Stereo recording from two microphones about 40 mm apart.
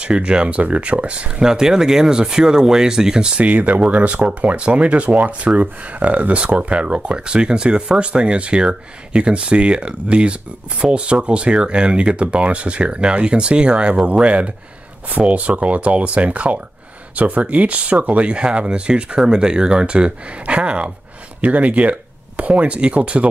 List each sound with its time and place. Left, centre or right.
0.0 s speech: right
1.4 s speech: centre
3.4 s speech: right